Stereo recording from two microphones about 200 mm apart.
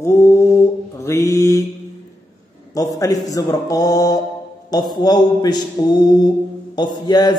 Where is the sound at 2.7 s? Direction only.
15° left (ahead or behind).